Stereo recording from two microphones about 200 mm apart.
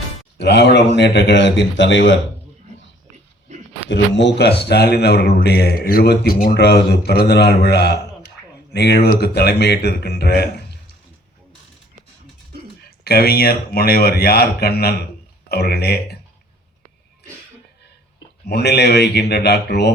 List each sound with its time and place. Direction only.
0.3 s a man's voice: 60° left (ahead or behind)
3.5 s a sound: 35° right (ahead or behind)
3.8 s a man's voice: 65° left (ahead or behind)
13.1 s speech: 50° left (ahead or behind)
18.4 s a man's voice: 55° left (ahead or behind)